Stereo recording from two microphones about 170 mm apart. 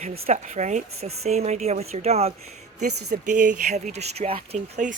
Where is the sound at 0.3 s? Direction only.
45° right (ahead or behind).